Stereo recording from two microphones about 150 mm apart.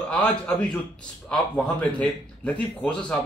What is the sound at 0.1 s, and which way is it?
Speech, 5° left (ahead or behind).